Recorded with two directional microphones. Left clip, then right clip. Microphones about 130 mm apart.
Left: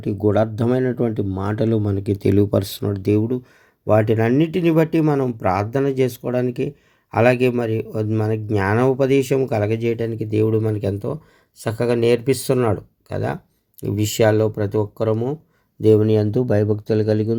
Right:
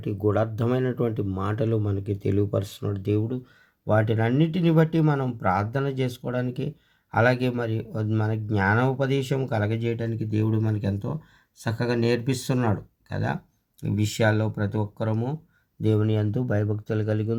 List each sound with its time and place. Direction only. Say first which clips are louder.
0.0 s speech: left 6 dB; 30° left (ahead or behind)
2.0 s speech: left 8 dB; 50° left (ahead or behind); by 17.3 s 30° left (ahead or behind)